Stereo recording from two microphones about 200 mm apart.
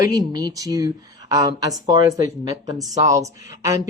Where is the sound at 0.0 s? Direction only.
20° right (ahead or behind).